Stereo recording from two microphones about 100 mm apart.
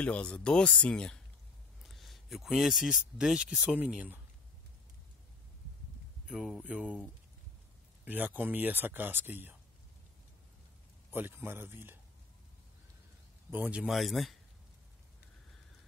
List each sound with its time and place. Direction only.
0.0 s speech: 10° left (ahead or behind); by 4.2 s 15° right (ahead or behind)
6.2 s speech: centre (ahead or behind)
8.0 s speech: 15° right (ahead or behind)
11.1 s speech: 20° right (ahead or behind)
13.5 s a man's voice: 15° right (ahead or behind)
13.8 s speech: centre (ahead or behind)